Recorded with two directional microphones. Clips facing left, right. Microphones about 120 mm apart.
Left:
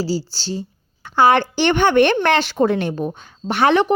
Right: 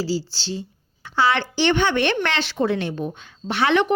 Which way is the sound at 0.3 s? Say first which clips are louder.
Left 3 dB; 40° left (ahead or behind).